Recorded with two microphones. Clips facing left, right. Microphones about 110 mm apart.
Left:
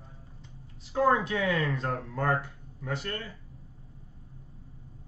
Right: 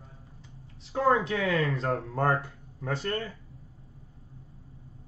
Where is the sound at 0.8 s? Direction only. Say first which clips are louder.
Even; 30° right (ahead or behind).